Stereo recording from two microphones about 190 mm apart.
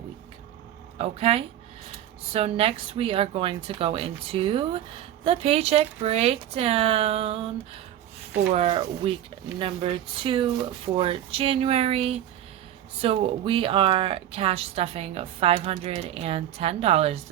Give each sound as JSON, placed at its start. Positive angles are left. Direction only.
{"t": 0.9, "sound": "speech", "side_deg": -30}
{"t": 8.5, "sound": "speech", "side_deg": -30}